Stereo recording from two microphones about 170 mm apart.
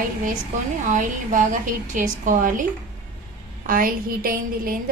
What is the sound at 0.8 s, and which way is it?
A woman's voice, 50° right (ahead or behind).